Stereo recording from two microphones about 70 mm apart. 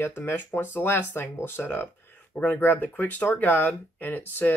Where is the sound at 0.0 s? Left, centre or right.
Left.